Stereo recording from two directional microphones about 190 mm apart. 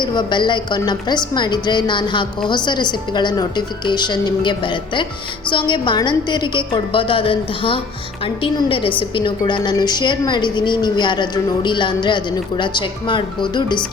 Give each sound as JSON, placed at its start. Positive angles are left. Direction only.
{"t": 0.0, "sound": "a woman's voice", "side_deg": 25}